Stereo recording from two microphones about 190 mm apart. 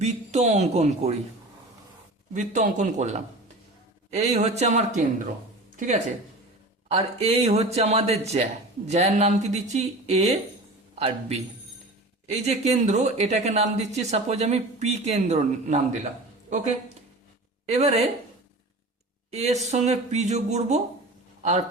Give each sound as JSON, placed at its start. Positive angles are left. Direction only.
{"t": 0.0, "sound": "speech", "side_deg": -35}
{"t": 2.3, "sound": "a man's voice", "side_deg": -40}
{"t": 19.3, "sound": "speech", "side_deg": -35}